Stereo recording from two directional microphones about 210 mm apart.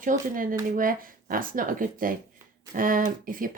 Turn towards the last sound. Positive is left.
turn(degrees=-40)  # may be behind; listen again after turning